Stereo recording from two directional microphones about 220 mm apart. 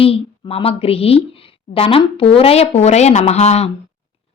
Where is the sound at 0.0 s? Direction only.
25° left (ahead or behind).